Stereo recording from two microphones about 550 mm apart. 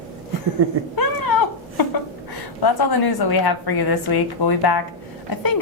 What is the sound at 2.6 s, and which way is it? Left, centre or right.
A woman's voice, left.